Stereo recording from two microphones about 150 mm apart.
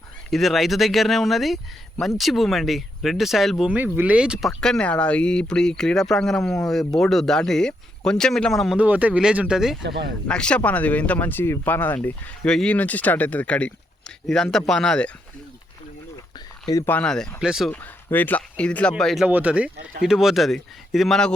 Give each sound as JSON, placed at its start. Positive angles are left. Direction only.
{"t": 0.3, "sound": "speech", "side_deg": 0}
{"t": 16.6, "sound": "speech", "side_deg": 25}
{"t": 16.9, "sound": "speech", "side_deg": 5}
{"t": 17.7, "sound": "speech", "side_deg": 10}
{"t": 19.3, "sound": "speech", "side_deg": -10}